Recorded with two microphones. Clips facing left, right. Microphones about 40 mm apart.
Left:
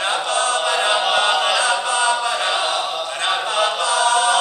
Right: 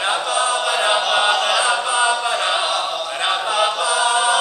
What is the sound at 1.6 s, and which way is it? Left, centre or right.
Chant, centre.